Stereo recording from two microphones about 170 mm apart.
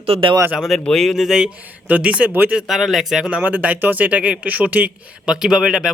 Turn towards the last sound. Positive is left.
turn(degrees=-5)  # may be behind; listen again after turning